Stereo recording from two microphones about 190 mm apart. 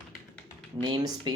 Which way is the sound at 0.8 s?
25° right (ahead or behind).